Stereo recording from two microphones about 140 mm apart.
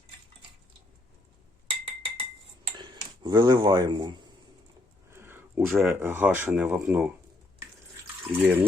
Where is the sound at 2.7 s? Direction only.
35° right (ahead or behind).